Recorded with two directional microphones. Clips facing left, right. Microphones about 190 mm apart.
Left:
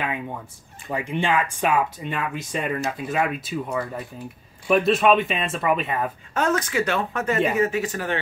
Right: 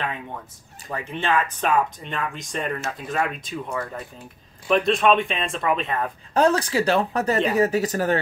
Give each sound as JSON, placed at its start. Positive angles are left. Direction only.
{"t": 0.9, "sound": "speech", "side_deg": 15}
{"t": 6.3, "sound": "speech", "side_deg": -35}